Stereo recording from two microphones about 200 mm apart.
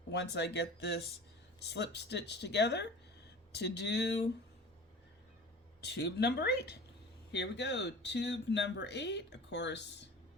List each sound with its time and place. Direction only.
0.1 s speech: 60° left (ahead or behind)
5.8 s speech: 55° left (ahead or behind)